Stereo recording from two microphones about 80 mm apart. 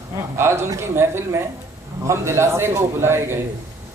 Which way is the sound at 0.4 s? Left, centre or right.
Right.